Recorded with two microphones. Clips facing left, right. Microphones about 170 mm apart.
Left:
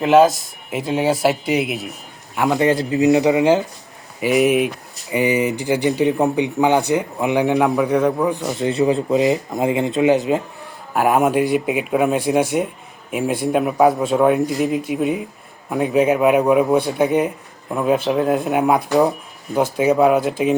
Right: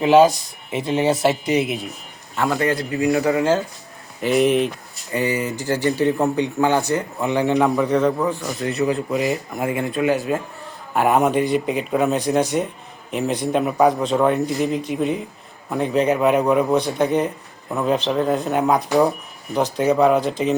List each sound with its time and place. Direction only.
0.0 s speech: centre (ahead or behind)
2.3 s speech: 15° left (ahead or behind)
10.9 s speech: 5° left (ahead or behind)